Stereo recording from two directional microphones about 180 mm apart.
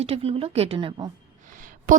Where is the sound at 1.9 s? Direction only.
45° right (ahead or behind).